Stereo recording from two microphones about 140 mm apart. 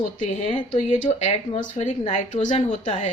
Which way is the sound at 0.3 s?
45° left (ahead or behind).